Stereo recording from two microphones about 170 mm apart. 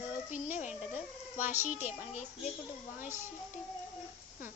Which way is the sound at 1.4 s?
10° right (ahead or behind).